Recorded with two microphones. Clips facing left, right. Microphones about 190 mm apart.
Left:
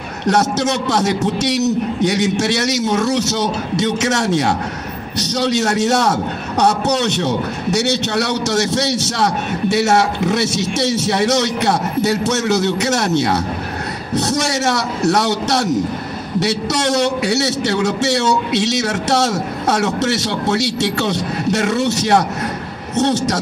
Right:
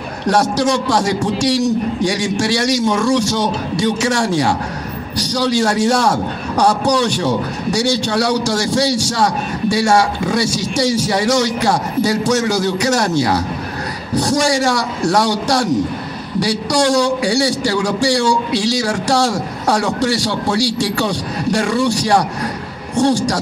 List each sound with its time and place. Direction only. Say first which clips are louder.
0.3 s a man's voice: right 1 dB; 25° left (ahead or behind)